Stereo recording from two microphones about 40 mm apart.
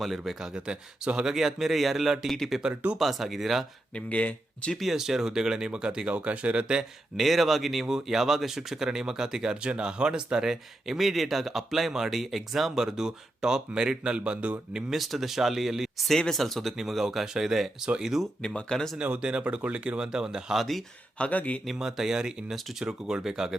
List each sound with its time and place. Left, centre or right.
0.0 s speech: centre
0.3 s speech: centre
3.9 s speech: left
4.8 s speech: centre; by 6.8 s right
7.2 s speech: centre
14.9 s speech: centre
16.3 s speech: centre
18.4 s speech: centre
19.2 s speech: right
20.1 s speech: centre
20.6 s speech: centre
21.2 s a man's voice: left
21.8 s speech: centre